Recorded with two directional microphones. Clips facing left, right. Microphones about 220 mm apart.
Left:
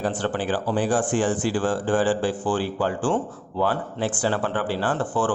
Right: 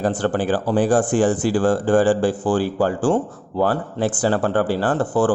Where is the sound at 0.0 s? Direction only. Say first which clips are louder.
Right 5 dB; 45° right (ahead or behind).